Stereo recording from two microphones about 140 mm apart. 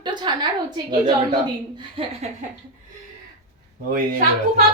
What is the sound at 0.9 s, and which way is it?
Speech, 35° right (ahead or behind).